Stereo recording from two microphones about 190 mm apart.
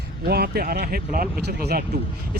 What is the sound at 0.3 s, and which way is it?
Speech, 55° right (ahead or behind).